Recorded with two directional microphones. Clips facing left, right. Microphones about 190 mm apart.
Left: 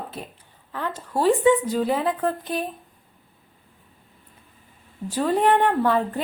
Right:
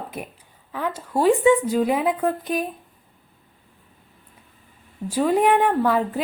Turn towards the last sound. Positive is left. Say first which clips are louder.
# right 1 dB
turn(degrees=-5)  # may be behind; listen again after turning